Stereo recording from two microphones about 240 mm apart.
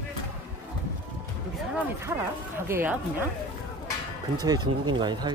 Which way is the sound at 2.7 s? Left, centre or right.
Centre.